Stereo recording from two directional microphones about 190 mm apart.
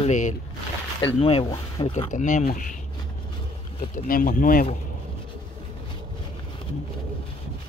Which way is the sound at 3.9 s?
45° left (ahead or behind).